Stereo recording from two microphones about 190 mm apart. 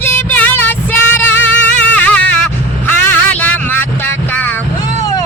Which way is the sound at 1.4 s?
5° left (ahead or behind).